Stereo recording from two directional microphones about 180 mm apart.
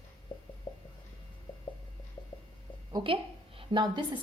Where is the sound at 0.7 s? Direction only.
30° left (ahead or behind).